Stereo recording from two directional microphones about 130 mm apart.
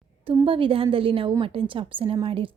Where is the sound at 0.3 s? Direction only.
45° right (ahead or behind).